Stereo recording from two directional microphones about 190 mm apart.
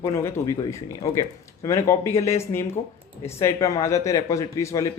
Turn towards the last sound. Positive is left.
turn(degrees=15)  # may be behind; listen again after turning